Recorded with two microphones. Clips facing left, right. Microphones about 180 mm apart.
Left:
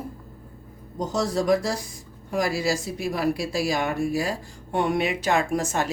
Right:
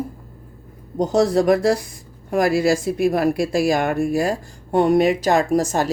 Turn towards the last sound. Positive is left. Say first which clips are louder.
# right 6 dB
turn(degrees=-40)  # may be behind; listen again after turning